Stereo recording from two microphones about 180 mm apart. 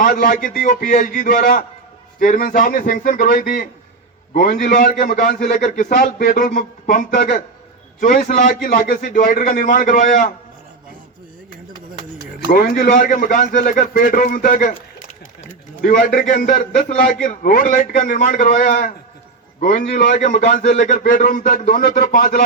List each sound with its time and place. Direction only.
0.0 s a man's voice: 50° left (ahead or behind)
12.5 s a man's voice: 55° left (ahead or behind)
15.8 s a man's voice: 50° left (ahead or behind)